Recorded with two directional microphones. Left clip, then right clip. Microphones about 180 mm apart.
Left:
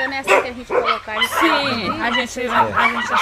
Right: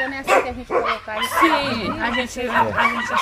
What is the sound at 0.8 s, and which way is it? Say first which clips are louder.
Speech: left 4 dB; 35° left (ahead or behind).